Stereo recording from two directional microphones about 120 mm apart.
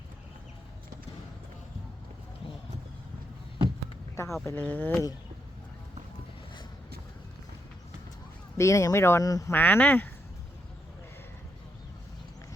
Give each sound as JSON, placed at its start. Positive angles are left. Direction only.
{"t": 4.1, "sound": "speech", "side_deg": 25}
{"t": 8.5, "sound": "speech", "side_deg": 25}
{"t": 9.5, "sound": "speech", "side_deg": 15}